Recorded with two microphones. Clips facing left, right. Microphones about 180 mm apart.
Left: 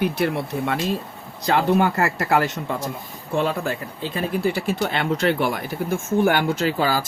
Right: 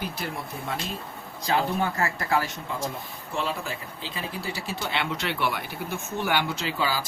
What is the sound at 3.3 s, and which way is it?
Speech, 60° left (ahead or behind).